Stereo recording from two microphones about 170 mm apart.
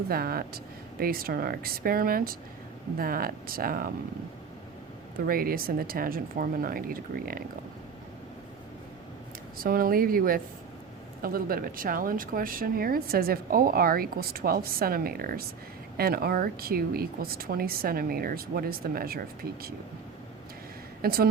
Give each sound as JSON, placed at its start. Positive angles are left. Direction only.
{"t": 0.1, "sound": "speech", "side_deg": -65}
{"t": 5.2, "sound": "speech", "side_deg": -60}
{"t": 9.6, "sound": "speech", "side_deg": -60}
{"t": 21.0, "sound": "speech", "side_deg": -65}